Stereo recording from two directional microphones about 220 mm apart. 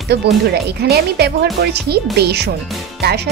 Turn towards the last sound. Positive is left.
turn(degrees=-45)  # may be behind; listen again after turning